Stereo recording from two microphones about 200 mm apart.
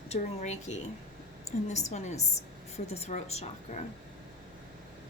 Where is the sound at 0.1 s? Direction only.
35° left (ahead or behind).